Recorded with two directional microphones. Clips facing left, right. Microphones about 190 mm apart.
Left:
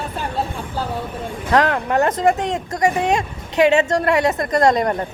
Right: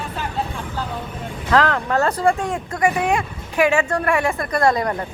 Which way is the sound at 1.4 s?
20° left (ahead or behind).